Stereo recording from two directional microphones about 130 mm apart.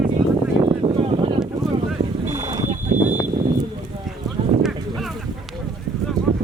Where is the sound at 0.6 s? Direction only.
45° right (ahead or behind).